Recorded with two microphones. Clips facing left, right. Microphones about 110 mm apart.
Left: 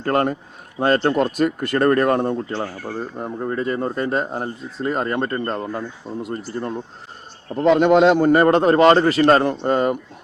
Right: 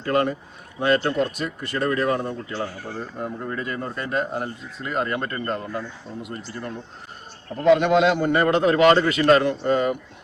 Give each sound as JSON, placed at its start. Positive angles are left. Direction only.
{"t": 0.0, "sound": "speech", "side_deg": 45}
{"t": 3.2, "sound": "speech", "side_deg": 30}